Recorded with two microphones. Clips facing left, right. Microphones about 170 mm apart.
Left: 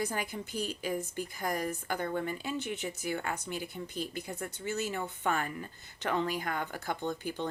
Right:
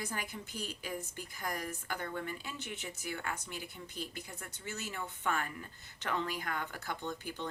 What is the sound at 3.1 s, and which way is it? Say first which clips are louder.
Speech: left 4 dB; 30° left (ahead or behind).